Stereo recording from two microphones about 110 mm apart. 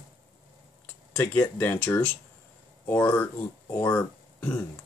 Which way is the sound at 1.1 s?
20° left (ahead or behind).